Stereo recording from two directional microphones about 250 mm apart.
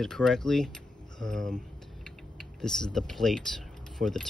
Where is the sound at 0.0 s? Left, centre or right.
Centre.